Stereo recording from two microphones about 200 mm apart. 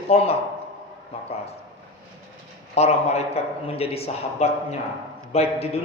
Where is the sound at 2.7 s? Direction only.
30° left (ahead or behind).